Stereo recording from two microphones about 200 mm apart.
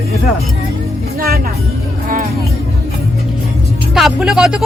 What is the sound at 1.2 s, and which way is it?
Music, 50° right (ahead or behind).